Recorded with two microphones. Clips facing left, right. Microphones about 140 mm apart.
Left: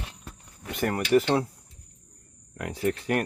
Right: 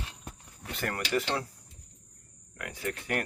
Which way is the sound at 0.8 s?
20° left (ahead or behind).